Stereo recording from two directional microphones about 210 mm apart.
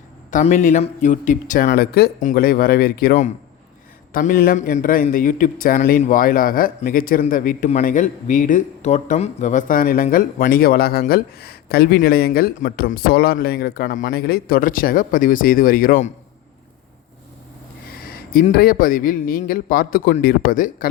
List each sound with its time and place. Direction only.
0.3 s a man's voice: 35° left (ahead or behind)
18.1 s speech: 45° left (ahead or behind)